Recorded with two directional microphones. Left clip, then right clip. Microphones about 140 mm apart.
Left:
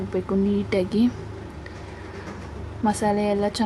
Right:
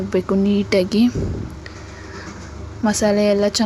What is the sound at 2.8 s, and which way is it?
Speech, 20° right (ahead or behind).